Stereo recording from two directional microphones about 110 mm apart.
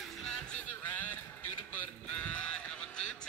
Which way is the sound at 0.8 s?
15° left (ahead or behind).